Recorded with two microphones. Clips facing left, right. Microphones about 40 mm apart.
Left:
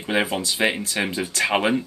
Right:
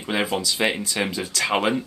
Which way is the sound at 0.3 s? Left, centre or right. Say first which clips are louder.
Even; centre.